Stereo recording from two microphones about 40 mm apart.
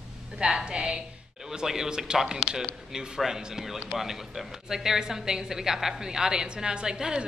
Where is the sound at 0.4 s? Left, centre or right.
Right.